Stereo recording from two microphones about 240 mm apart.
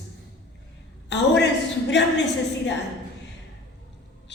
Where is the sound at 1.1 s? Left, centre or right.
Left.